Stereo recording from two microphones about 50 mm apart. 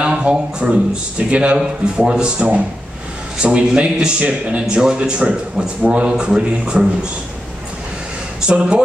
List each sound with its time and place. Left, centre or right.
0.0 s a man's voice: centre
8.5 s speech: centre